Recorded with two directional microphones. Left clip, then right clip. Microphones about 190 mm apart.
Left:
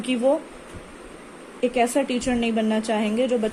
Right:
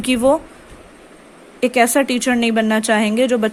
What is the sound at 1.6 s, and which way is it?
A woman's voice, 50° right (ahead or behind).